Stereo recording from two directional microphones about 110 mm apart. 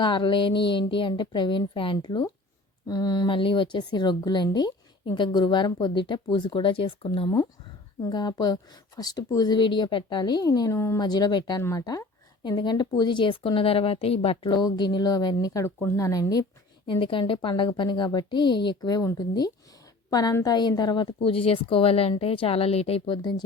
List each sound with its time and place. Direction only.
0.0 s speech: 45° left (ahead or behind)
3.3 s speech: 50° left (ahead or behind); by 11.0 s 25° left (ahead or behind)
11.0 s speech: 40° left (ahead or behind)
11.6 s speech: 30° left (ahead or behind); by 14.5 s 60° left (ahead or behind)
14.5 s speech: 45° left (ahead or behind)
15.6 s a woman's voice: 25° left (ahead or behind); by 23.3 s 50° left (ahead or behind)